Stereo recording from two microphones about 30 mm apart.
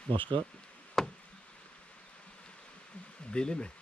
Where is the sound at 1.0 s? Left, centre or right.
Centre.